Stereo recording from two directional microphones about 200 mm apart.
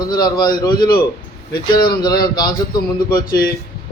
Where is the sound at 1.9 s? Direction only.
20° left (ahead or behind).